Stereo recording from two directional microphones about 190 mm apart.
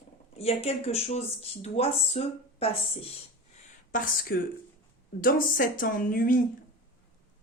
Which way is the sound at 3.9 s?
50° left (ahead or behind).